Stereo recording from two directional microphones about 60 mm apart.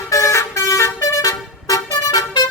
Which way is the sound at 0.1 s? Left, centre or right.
Left.